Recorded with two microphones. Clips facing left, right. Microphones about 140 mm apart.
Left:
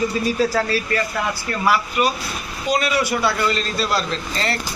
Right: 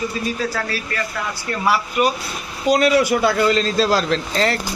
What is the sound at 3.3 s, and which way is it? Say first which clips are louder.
Speech: right 5 dB; 90° right.